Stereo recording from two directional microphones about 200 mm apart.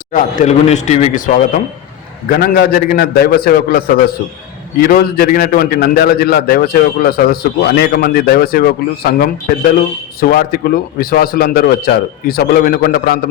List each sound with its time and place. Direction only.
0.1 s a man's voice: 35° left (ahead or behind)